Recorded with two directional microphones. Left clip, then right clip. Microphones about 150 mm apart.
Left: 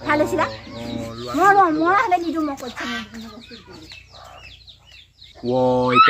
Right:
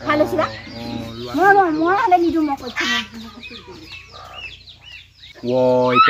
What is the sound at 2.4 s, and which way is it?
Speech, 40° left (ahead or behind).